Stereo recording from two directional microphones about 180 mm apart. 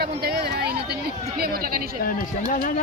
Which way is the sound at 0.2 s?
60° right (ahead or behind).